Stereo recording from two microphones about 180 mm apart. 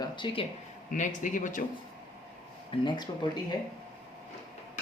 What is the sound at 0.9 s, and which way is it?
Speech, 45° left (ahead or behind).